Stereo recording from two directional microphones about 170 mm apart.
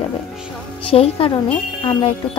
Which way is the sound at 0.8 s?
35° left (ahead or behind).